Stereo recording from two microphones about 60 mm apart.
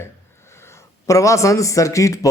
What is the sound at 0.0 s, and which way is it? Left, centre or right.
Speech, left.